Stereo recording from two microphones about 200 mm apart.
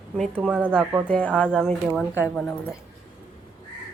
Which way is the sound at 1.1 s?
5° left (ahead or behind).